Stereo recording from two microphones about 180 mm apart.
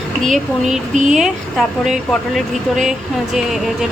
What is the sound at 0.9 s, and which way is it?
Speech, 40° right (ahead or behind).